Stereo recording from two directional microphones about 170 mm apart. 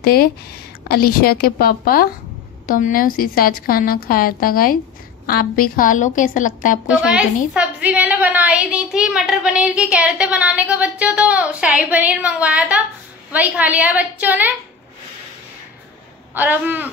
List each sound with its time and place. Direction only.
0.0 s a woman's voice: 65° left (ahead or behind)
7.0 s a woman's voice: 5° right (ahead or behind)
16.3 s a woman's voice: 10° right (ahead or behind)